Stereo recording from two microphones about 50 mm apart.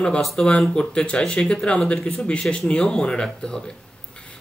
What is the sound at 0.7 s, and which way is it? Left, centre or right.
Speech, centre.